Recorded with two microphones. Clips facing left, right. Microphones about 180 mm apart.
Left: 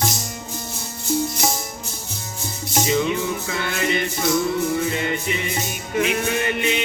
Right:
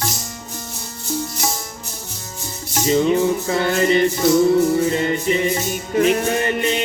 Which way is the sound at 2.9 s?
40° right (ahead or behind).